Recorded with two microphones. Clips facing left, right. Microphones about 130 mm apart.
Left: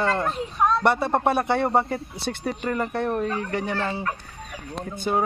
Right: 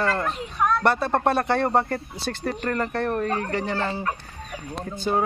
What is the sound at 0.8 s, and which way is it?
A man's voice, 15° left (ahead or behind).